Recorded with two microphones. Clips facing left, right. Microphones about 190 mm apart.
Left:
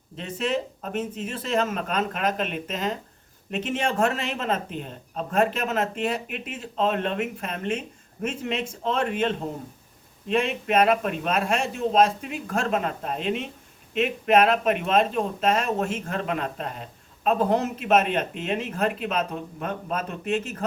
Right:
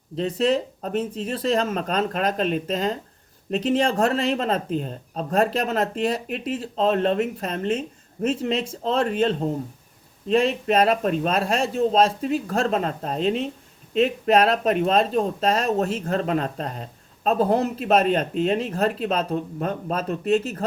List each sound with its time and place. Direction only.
0.2 s speech: 35° right (ahead or behind)